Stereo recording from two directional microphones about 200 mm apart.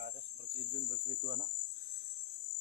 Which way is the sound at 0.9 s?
50° right (ahead or behind).